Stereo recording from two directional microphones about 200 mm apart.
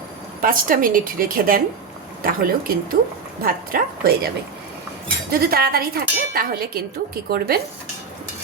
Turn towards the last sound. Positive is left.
turn(degrees=-50)  # may be behind; listen again after turning